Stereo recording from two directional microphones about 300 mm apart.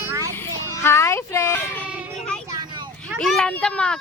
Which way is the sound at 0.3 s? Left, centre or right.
Centre.